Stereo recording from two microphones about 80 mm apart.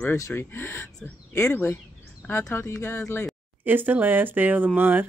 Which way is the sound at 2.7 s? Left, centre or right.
Left.